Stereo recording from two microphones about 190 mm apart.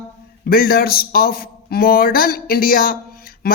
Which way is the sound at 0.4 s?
50° left (ahead or behind).